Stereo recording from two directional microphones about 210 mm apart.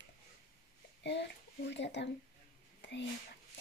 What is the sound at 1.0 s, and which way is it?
A child's voice, 55° left (ahead or behind).